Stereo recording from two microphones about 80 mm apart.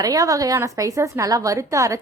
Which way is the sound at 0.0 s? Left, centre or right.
Right.